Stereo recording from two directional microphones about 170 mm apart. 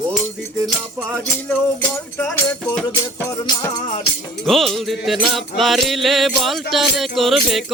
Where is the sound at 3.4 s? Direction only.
25° left (ahead or behind).